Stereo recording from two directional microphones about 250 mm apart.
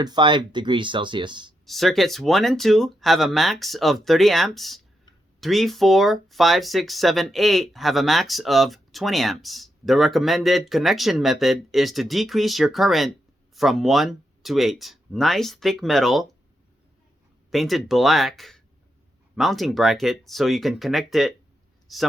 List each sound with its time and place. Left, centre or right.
0.0 s speech: centre
1.6 s speech: centre
17.5 s a man's voice: centre